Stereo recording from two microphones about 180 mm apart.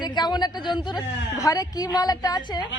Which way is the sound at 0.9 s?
20° left (ahead or behind).